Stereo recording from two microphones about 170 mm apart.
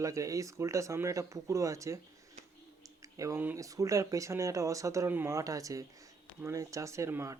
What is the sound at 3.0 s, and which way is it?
Speech, 20° right (ahead or behind).